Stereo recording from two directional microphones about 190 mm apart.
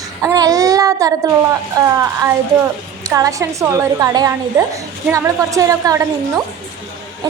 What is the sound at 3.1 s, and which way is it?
A woman's voice, 15° right (ahead or behind).